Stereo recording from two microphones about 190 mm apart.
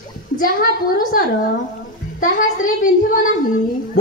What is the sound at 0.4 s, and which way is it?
A woman's voice, 50° left (ahead or behind).